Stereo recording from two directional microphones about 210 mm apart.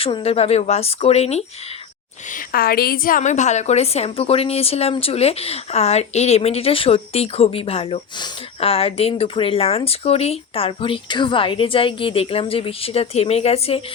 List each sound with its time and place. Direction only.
0.0 s a woman's voice: 25° left (ahead or behind)
2.5 s a woman's voice: 45° left (ahead or behind); by 13.8 s 30° left (ahead or behind)